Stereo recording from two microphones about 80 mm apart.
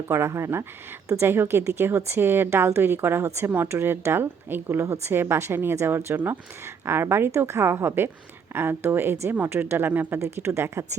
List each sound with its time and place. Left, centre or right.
0.1 s a woman's voice: right